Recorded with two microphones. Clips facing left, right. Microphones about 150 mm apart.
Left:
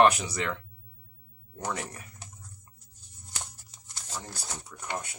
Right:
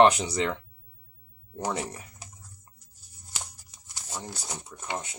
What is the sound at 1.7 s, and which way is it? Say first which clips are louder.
Speech: right 3 dB; 25° right (ahead or behind).